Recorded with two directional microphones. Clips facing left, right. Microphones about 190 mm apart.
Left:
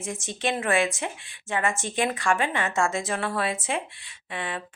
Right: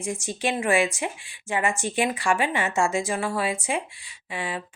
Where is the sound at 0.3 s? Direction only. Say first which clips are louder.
Right 2 dB; 10° right (ahead or behind).